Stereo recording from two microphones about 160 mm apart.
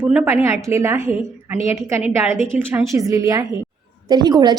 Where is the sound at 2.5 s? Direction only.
15° right (ahead or behind).